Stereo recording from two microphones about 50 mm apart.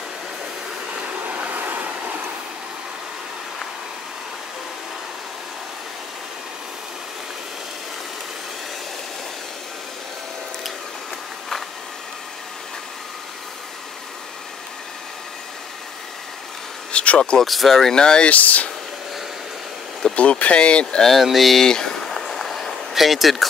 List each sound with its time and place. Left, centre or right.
0.9 s stream: right
16.9 s a sound: left
17.2 s speech: centre
17.5 s speech: centre
18.3 s speech: left
20.2 s speech: left
20.8 s speech: centre
21.6 s a sound: centre